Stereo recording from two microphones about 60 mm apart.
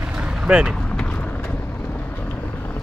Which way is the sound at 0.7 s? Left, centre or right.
Centre.